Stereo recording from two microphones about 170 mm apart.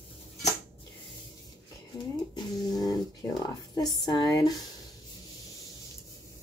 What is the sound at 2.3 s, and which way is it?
Speech, 25° left (ahead or behind).